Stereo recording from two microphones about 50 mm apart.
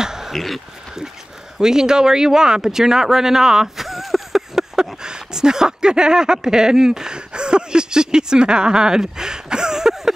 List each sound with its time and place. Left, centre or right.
0.0 s a sound: centre
0.3 s speech: centre
1.6 s speech: centre